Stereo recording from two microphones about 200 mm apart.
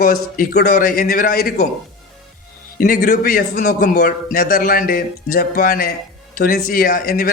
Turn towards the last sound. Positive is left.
turn(degrees=45)  # may be behind; listen again after turning